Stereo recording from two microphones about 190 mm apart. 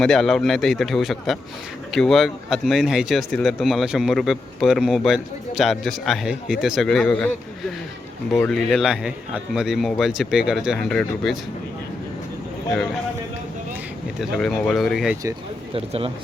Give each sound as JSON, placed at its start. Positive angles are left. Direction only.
{"t": 0.0, "sound": "speech", "side_deg": 0}
{"t": 8.4, "sound": "speech", "side_deg": 0}
{"t": 14.2, "sound": "speech", "side_deg": 0}
{"t": 15.7, "sound": "speech", "side_deg": -30}